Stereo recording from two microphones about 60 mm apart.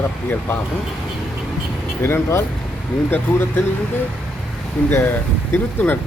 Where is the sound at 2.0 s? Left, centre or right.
Left.